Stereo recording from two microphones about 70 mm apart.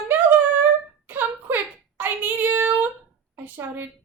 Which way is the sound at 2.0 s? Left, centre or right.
Right.